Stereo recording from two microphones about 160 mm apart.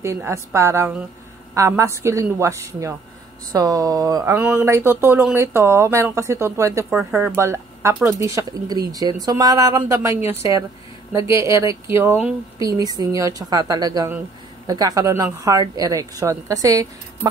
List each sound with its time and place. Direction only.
0.0 s speech: 20° right (ahead or behind)